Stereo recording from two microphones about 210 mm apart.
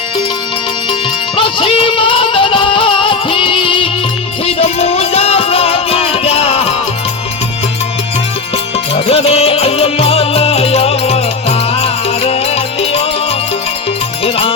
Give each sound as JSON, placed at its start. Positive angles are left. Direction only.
{"t": 1.4, "sound": "music", "side_deg": 25}
{"t": 9.0, "sound": "music", "side_deg": 30}
{"t": 14.3, "sound": "music", "side_deg": 25}